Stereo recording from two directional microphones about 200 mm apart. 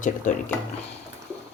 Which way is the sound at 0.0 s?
40° left (ahead or behind).